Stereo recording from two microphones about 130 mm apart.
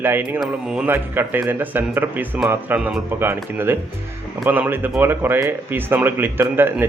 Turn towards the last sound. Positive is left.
turn(degrees=-15)  # may be behind; listen again after turning